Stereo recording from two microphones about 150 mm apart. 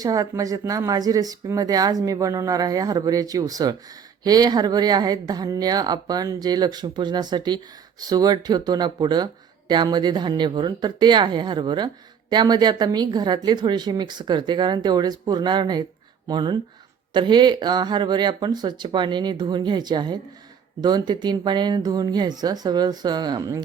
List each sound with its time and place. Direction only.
0.0 s speech: 25° right (ahead or behind)